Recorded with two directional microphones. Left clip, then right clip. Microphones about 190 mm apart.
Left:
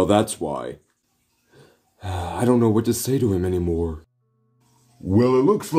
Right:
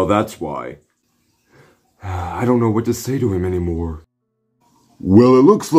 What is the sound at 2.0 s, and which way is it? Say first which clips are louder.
Speech: right 3 dB; 35° left (ahead or behind).